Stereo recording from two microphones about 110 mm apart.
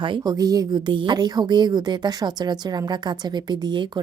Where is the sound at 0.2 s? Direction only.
35° right (ahead or behind).